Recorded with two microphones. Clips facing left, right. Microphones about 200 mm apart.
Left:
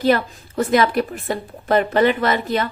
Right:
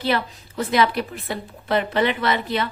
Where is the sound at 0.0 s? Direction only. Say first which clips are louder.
Left 6 dB; 45° left (ahead or behind).